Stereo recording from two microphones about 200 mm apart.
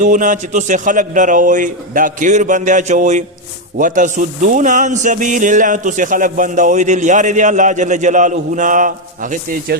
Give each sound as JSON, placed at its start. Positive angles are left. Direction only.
{"t": 0.0, "sound": "a man's voice", "side_deg": -40}